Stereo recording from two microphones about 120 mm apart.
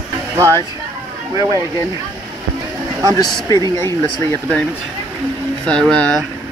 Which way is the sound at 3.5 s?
25° left (ahead or behind).